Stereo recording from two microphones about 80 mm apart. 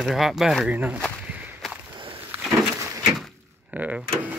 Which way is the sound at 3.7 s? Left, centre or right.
Centre.